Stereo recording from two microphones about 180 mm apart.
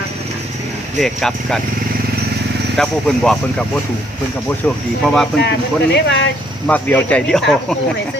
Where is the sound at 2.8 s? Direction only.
5° left (ahead or behind).